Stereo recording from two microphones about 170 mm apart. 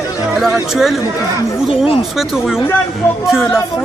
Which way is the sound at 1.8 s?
35° left (ahead or behind).